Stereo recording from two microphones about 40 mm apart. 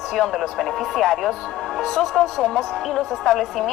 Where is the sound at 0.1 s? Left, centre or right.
Centre.